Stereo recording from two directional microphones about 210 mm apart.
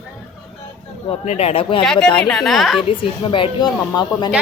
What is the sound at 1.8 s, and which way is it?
Speech, 5° left (ahead or behind).